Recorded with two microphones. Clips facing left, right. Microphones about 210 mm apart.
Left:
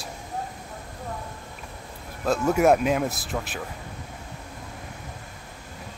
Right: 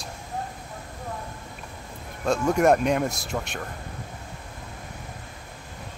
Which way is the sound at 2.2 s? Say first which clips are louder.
Even; 5° left (ahead or behind).